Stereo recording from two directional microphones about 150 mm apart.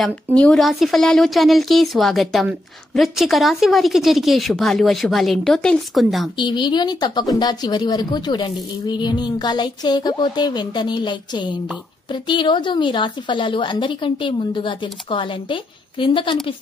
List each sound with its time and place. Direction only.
0.0 s a woman's voice: 5° left (ahead or behind)
6.3 s a woman's voice: 30° left (ahead or behind)